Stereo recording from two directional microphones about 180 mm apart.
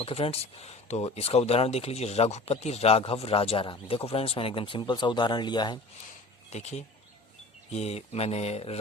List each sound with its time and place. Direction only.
0.0 s speech: 35° left (ahead or behind)
6.5 s speech: 40° left (ahead or behind)